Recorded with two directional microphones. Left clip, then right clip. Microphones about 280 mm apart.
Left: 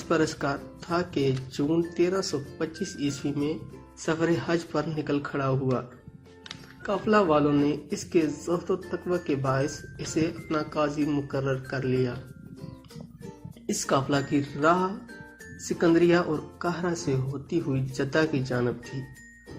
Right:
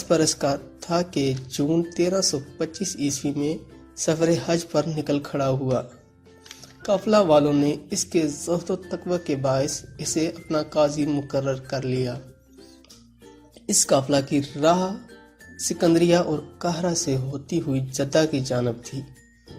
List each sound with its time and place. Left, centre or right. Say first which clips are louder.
0.1 s speech: right 5 dB; right
6.8 s speech: right 4 dB; right
13.7 s speech: right 6 dB; right